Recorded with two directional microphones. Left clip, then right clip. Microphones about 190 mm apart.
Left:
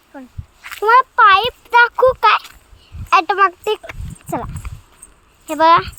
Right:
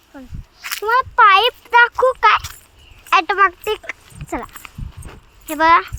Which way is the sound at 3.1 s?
10° left (ahead or behind).